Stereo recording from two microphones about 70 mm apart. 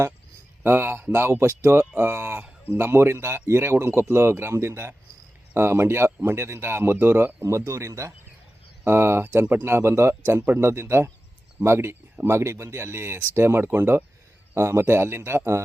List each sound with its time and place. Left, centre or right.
0.6 s speech: right
7.4 s speech: right
14.5 s speech: right